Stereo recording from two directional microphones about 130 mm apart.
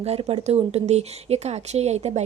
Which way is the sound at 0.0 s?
50° right (ahead or behind).